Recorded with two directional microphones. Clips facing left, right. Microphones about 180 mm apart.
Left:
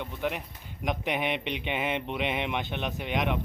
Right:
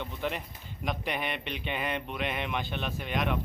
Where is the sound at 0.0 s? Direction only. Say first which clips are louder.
Left 2 dB; 10° left (ahead or behind).